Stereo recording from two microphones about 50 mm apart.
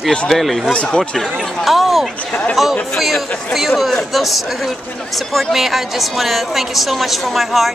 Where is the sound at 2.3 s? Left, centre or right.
Left.